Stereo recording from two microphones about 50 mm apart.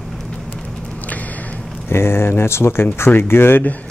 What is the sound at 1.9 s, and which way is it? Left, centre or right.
Speech, left.